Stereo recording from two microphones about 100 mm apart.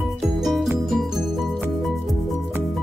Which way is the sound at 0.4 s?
Centre (ahead or behind).